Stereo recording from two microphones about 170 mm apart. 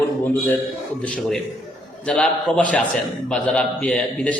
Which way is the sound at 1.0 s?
5° left (ahead or behind).